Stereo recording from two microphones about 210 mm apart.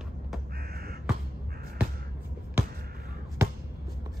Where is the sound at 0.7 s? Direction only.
45° right (ahead or behind).